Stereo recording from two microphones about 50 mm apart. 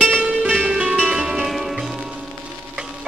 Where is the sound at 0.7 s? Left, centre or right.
Right.